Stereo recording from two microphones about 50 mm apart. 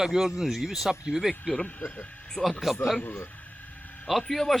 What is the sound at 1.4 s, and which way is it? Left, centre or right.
Speech, centre.